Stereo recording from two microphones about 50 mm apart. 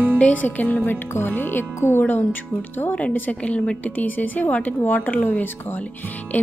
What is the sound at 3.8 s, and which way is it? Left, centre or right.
A woman's voice, left.